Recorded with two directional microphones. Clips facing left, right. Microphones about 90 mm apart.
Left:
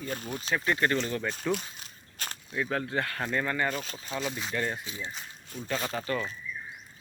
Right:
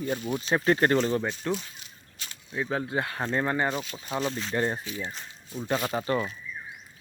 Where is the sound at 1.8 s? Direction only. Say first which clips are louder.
Left 3 dB; 50° left (ahead or behind).